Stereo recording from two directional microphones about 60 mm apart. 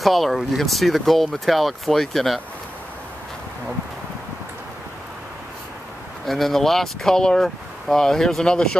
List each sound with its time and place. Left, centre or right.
0.0 s speech: centre
6.2 s speech: centre